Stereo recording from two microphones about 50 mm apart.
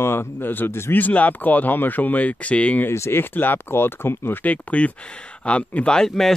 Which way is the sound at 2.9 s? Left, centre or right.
Left.